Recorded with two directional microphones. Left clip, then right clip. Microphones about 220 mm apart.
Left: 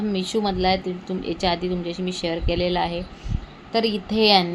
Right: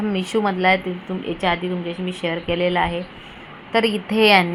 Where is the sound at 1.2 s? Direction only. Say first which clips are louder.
Right 2 dB; 10° left (ahead or behind).